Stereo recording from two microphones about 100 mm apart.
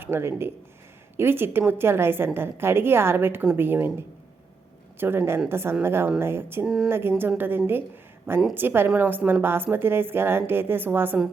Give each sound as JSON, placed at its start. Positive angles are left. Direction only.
{"t": 0.0, "sound": "a woman's voice", "side_deg": -25}
{"t": 4.9, "sound": "a woman's voice", "side_deg": -25}